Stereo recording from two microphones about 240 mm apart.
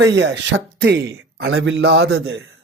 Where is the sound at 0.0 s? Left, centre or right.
Right.